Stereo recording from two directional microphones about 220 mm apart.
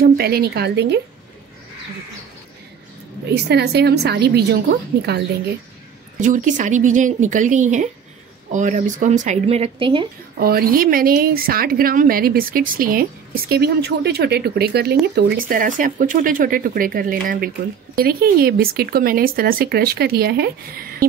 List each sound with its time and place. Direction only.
0.0 s speech: 45° right (ahead or behind)
3.4 s speech: 50° right (ahead or behind)
6.1 s speech: 35° right (ahead or behind)
10.4 s speech: 45° right (ahead or behind)